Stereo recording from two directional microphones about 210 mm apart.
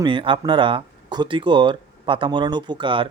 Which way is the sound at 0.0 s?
25° right (ahead or behind).